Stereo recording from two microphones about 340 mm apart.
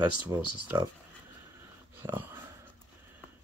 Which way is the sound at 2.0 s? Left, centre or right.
Centre.